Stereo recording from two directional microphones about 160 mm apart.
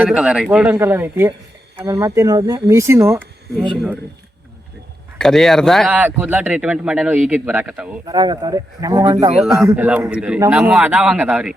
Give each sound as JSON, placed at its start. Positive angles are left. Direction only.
{"t": 0.0, "sound": "speech", "side_deg": -5}
{"t": 5.1, "sound": "speech", "side_deg": 5}
{"t": 5.9, "sound": "speech", "side_deg": -10}
{"t": 8.0, "sound": "speech", "side_deg": -25}
{"t": 9.4, "sound": "speech", "side_deg": -5}